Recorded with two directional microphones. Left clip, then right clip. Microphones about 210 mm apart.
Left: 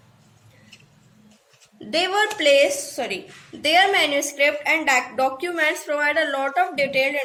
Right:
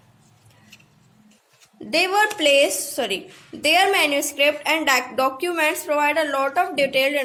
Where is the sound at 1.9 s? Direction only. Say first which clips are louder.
Right 2 dB; 30° right (ahead or behind).